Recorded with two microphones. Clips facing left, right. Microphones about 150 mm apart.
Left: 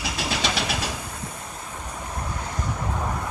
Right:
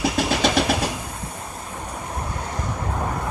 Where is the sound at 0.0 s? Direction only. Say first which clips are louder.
Right 7 dB; 50° right (ahead or behind).